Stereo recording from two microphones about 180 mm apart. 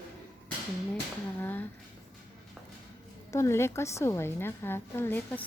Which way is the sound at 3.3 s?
15° left (ahead or behind).